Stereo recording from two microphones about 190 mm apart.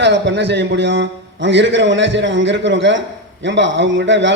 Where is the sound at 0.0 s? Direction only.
65° right (ahead or behind).